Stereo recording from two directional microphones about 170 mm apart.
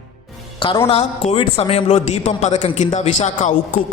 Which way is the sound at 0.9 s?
35° left (ahead or behind).